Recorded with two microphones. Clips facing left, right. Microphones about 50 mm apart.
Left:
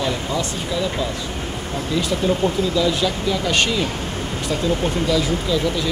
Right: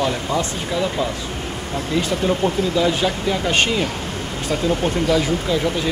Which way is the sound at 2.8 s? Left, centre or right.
Right.